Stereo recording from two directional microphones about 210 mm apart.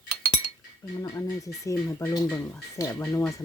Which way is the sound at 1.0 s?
15° left (ahead or behind).